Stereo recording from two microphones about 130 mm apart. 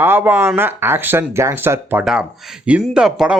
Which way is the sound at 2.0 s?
5° right (ahead or behind).